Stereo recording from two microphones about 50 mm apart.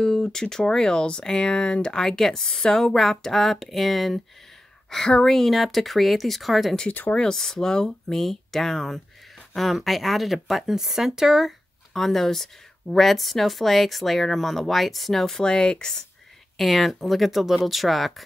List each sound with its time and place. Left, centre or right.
0.0 s speech: centre
4.8 s a sound: centre
5.1 s speech: centre
6.9 s speech: left
7.3 s speech: centre
11.9 s speech: centre
16.5 s speech: centre